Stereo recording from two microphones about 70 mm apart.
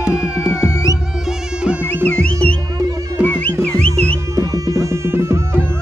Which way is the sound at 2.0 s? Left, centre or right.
Left.